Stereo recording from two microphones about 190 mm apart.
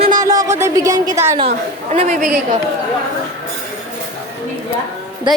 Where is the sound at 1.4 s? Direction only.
35° right (ahead or behind).